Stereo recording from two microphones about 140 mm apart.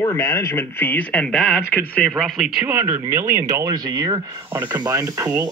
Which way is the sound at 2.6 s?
15° right (ahead or behind).